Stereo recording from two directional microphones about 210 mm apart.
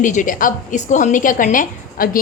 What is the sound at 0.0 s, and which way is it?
A woman's voice, 35° left (ahead or behind).